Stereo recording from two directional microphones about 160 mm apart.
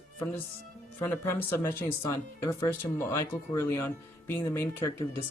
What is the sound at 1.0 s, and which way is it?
Speech, 15° left (ahead or behind).